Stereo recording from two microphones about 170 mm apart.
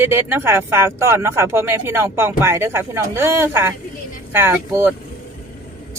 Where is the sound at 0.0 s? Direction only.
15° right (ahead or behind).